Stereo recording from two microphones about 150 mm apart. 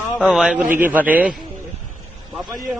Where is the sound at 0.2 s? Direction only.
5° right (ahead or behind).